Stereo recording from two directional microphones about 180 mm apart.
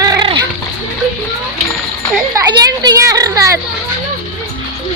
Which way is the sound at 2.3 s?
20° right (ahead or behind).